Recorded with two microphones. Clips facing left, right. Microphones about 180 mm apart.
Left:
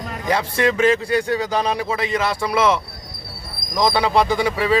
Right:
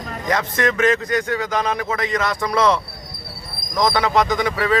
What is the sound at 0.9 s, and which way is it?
Speech, 30° left (ahead or behind).